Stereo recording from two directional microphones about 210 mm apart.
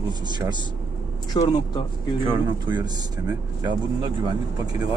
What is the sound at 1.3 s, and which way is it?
Speech, 20° left (ahead or behind).